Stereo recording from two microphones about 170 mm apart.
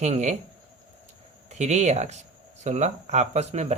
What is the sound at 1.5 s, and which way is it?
Speech, 40° right (ahead or behind).